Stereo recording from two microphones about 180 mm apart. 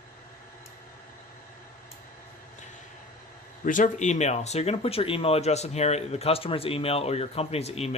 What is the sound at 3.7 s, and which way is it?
Speech, 45° left (ahead or behind).